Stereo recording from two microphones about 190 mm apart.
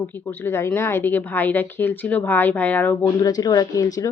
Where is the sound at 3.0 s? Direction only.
20° left (ahead or behind).